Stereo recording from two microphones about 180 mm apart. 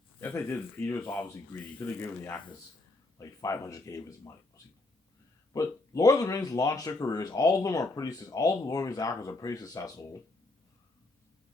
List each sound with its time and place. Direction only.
0.2 s speech: 10° left (ahead or behind)